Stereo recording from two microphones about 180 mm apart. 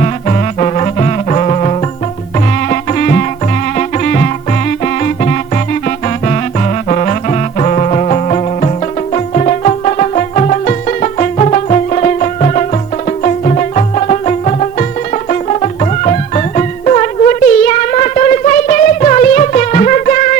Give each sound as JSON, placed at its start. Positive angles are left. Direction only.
{"t": 0.0, "sound": "music", "side_deg": 35}
{"t": 2.6, "sound": "music", "side_deg": 50}